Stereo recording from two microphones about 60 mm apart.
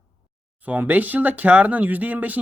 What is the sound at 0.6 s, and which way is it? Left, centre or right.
Speech, right.